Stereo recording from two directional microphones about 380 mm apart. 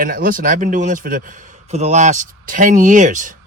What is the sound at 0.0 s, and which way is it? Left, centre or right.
A man's voice, right.